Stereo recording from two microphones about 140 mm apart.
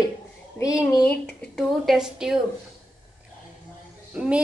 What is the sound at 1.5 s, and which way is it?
Speech, centre (ahead or behind).